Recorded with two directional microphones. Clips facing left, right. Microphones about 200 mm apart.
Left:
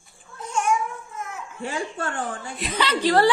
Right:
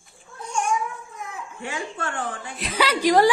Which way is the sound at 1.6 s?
40° left (ahead or behind).